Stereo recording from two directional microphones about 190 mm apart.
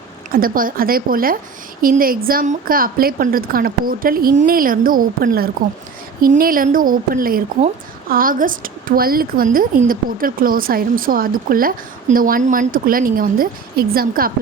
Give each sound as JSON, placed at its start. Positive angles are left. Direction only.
{"t": 0.3, "sound": "a woman's voice", "side_deg": -50}